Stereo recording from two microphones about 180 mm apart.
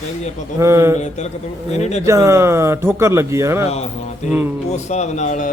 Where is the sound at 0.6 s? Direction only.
15° right (ahead or behind).